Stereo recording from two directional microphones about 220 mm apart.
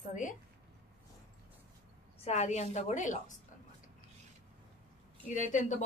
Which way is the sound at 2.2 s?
30° left (ahead or behind).